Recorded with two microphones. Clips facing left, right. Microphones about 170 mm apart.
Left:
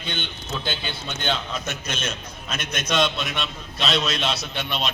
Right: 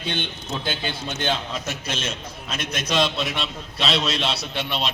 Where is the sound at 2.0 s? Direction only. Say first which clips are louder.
Right 1 dB; centre (ahead or behind).